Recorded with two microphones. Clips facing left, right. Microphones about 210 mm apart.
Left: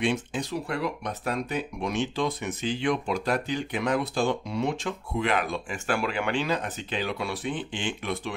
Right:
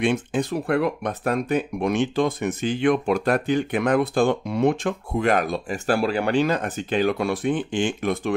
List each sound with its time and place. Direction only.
0.0 s speech: 55° right (ahead or behind)